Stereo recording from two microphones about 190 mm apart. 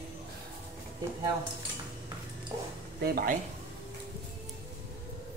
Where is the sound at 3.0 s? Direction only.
55° right (ahead or behind).